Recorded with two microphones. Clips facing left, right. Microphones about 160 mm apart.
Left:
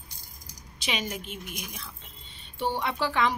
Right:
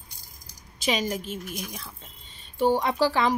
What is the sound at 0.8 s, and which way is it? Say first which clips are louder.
Speech: right 6 dB; 40° right (ahead or behind).